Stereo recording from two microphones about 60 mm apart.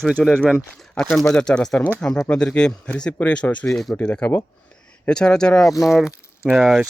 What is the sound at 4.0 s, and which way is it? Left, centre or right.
Speech, centre.